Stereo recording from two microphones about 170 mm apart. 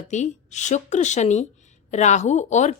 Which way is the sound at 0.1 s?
45° left (ahead or behind).